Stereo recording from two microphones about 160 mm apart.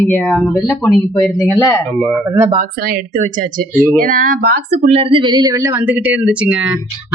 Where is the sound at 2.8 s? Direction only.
65° right (ahead or behind).